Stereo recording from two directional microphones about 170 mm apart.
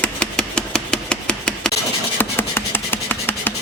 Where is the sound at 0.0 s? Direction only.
5° left (ahead or behind).